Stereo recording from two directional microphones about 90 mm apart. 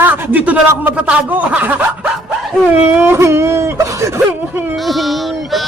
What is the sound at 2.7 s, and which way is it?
Whimper, 25° right (ahead or behind).